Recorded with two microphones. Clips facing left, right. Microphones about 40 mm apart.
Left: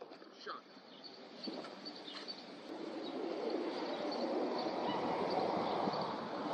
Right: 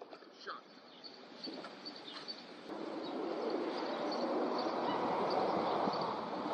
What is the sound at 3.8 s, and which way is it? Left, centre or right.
Vehicle, centre.